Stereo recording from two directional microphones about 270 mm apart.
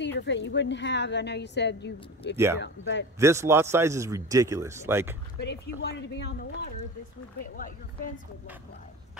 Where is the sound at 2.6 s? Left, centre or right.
Left.